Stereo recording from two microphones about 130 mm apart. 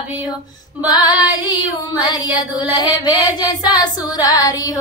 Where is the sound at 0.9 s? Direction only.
30° left (ahead or behind).